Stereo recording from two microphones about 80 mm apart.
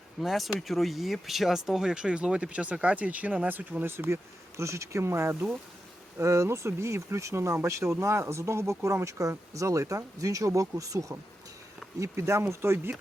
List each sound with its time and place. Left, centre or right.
0.2 s speech: centre; by 12.9 s right